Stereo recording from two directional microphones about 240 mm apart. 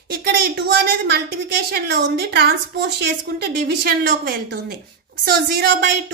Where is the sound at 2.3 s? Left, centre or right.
Right.